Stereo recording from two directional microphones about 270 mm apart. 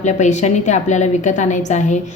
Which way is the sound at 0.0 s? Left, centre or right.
Left.